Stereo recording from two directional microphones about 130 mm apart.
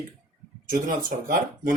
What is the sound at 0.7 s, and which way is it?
Speech, 90° right.